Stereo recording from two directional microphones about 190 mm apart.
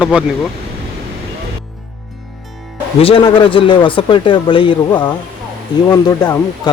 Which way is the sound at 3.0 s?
30° left (ahead or behind).